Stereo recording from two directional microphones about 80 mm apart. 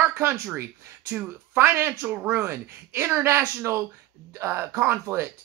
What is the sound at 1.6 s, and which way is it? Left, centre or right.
Speech, right.